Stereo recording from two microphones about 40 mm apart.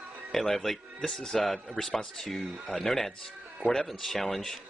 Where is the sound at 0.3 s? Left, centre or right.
Centre.